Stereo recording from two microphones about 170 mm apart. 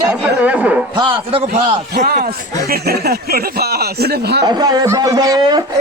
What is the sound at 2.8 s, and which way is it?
Speech, 65° right (ahead or behind).